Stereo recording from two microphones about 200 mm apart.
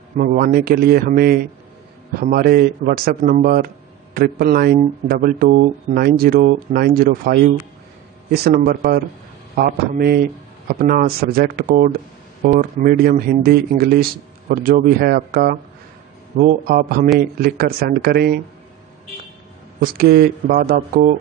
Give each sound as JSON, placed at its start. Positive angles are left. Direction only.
{"t": 0.2, "sound": "a man's voice", "side_deg": -45}
{"t": 19.8, "sound": "a man's voice", "side_deg": -50}